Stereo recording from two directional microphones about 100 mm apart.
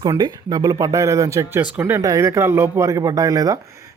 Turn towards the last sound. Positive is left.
turn(degrees=-35)  # may be behind; listen again after turning